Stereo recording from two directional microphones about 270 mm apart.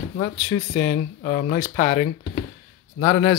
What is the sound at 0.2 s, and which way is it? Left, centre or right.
Speech, left.